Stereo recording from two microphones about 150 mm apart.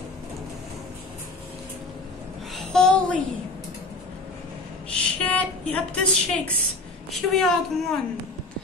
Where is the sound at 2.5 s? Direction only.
Centre (ahead or behind).